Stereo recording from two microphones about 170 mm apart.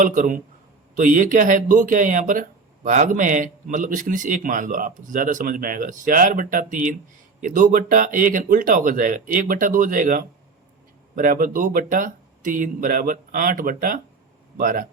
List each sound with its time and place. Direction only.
0.0 s speech: 50° right (ahead or behind)